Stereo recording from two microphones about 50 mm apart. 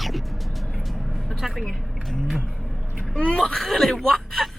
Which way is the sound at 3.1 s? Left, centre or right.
Centre.